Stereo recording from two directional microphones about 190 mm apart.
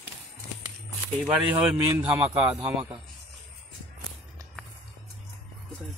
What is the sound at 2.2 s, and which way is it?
Speech, 30° right (ahead or behind).